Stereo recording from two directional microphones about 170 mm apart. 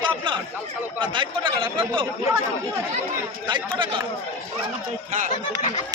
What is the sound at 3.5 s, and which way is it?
Speech, 25° right (ahead or behind).